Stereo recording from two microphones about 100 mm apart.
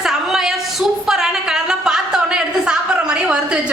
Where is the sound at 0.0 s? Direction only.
5° right (ahead or behind).